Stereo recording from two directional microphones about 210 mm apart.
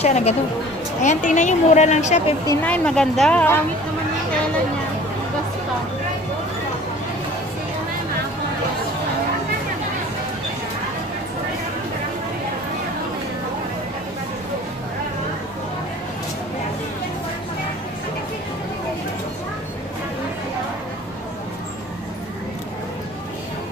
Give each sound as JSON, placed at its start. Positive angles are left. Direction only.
{"t": 0.0, "sound": "a woman's voice", "side_deg": 30}
{"t": 2.4, "sound": "a woman's voice", "side_deg": 10}